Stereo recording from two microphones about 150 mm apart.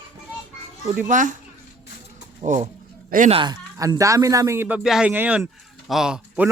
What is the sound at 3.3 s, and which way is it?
Speech, 35° right (ahead or behind).